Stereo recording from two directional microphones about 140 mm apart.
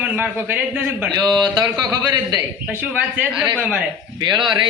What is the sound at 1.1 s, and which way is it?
Speech, 30° right (ahead or behind).